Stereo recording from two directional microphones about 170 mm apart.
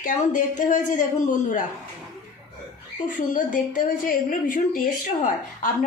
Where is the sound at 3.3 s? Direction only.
50° left (ahead or behind).